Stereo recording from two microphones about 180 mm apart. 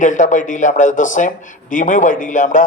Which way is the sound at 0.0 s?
45° left (ahead or behind).